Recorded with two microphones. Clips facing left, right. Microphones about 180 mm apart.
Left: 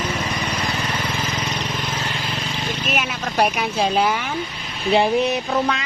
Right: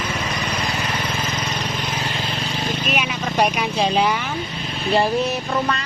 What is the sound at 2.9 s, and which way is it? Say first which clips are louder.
Speech: even; 5° left (ahead or behind).